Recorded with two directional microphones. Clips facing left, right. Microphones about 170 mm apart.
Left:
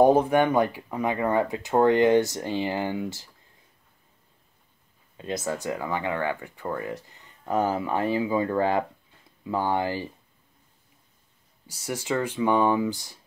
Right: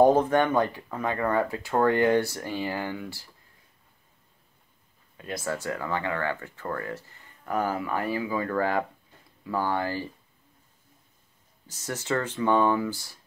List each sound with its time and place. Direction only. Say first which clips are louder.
0.0 s speech: left 1 dB; 10° left (ahead or behind)
5.1 s speech: left 2 dB; 20° left (ahead or behind)
11.6 s speech: left 2 dB; 10° left (ahead or behind)